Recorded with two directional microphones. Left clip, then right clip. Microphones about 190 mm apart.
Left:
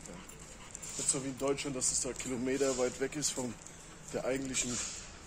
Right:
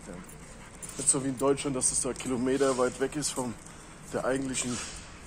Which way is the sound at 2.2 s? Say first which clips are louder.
Right 8 dB; 15° right (ahead or behind).